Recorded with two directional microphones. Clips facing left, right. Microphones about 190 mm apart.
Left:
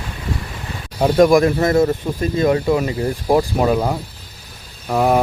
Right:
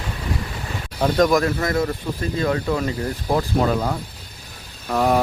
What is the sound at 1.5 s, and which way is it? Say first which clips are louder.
A man's voice: left 7 dB; 25° left (ahead or behind).